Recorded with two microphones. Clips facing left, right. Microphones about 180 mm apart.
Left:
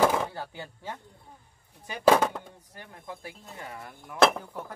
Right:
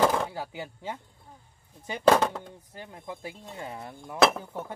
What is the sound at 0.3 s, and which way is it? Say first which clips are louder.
Speech: right 2 dB; 15° right (ahead or behind).